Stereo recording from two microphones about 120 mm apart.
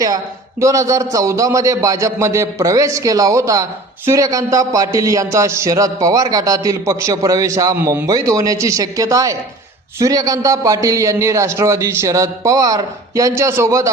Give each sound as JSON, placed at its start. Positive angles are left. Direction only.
{"t": 0.6, "sound": "a man's voice", "side_deg": -25}